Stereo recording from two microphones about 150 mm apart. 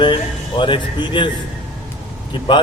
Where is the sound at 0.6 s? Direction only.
35° left (ahead or behind).